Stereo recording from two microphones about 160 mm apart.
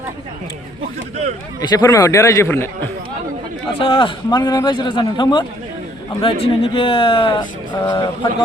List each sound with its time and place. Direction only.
1.6 s a man's voice: 25° left (ahead or behind)
3.8 s a man's voice: 30° left (ahead or behind)